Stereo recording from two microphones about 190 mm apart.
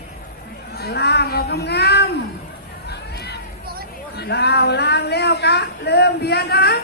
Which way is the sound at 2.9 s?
60° left (ahead or behind).